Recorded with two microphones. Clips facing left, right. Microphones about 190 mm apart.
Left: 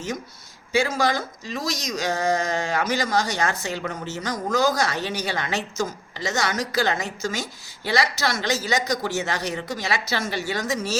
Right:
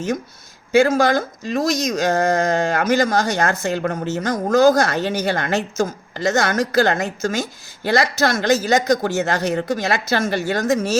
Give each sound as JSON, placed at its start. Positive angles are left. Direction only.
{"t": 0.7, "sound": "speech", "side_deg": -50}